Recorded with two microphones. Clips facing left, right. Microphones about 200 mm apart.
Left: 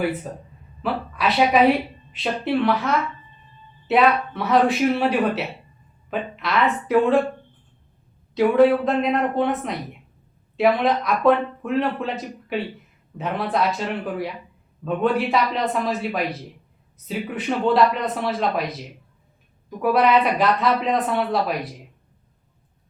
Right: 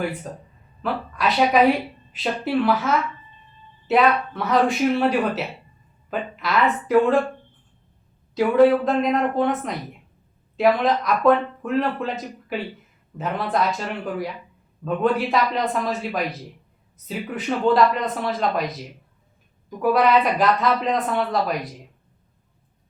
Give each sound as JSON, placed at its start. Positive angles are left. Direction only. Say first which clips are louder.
{"t": 0.8, "sound": "speech", "louder": "left 1 dB", "side_deg": 0}
{"t": 8.4, "sound": "speech", "louder": "even", "side_deg": 0}